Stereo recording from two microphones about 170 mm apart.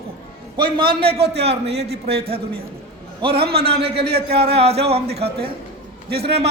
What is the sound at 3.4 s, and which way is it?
Speech, 65° right (ahead or behind).